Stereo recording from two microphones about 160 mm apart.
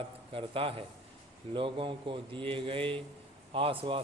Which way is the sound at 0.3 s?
35° right (ahead or behind).